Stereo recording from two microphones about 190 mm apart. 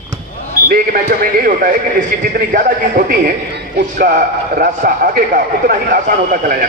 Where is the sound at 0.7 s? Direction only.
50° right (ahead or behind).